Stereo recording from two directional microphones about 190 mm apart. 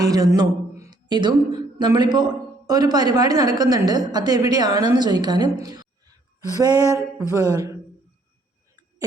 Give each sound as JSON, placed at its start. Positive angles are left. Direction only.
{"t": 0.0, "sound": "speech", "side_deg": -20}
{"t": 6.6, "sound": "a sound", "side_deg": -20}
{"t": 7.2, "sound": "a man's voice", "side_deg": -15}